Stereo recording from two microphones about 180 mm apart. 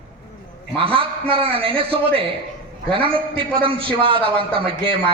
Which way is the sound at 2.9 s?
30° right (ahead or behind).